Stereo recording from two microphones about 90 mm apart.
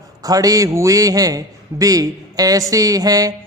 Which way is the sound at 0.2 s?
40° right (ahead or behind).